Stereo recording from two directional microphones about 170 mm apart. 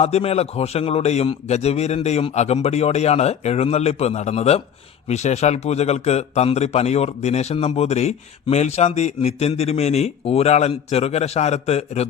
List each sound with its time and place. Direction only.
0.0 s a man's voice: 35° left (ahead or behind)